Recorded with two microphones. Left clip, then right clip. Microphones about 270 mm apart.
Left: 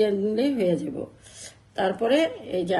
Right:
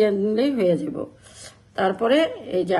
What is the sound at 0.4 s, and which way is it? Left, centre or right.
Speech, right.